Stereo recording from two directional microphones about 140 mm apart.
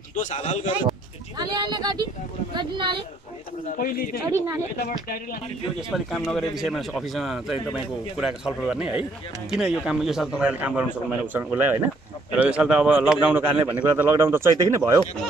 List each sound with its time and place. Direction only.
0.1 s speech: 55° left (ahead or behind)
1.4 s speech: 30° right (ahead or behind)
3.7 s speech: 90° left
5.9 s a man's voice: 5° left (ahead or behind); by 15.0 s 20° right (ahead or behind)